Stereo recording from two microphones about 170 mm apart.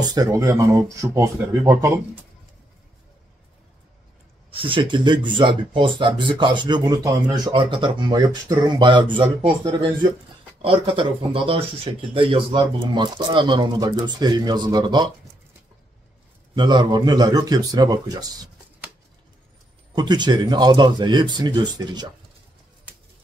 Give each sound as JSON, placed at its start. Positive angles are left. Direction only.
{"t": 0.0, "sound": "speech", "side_deg": -25}
{"t": 4.5, "sound": "speech", "side_deg": -30}
{"t": 16.5, "sound": "speech", "side_deg": -25}
{"t": 19.9, "sound": "speech", "side_deg": -25}